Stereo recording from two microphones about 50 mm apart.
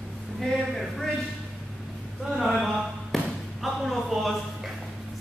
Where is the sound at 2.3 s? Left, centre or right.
Centre.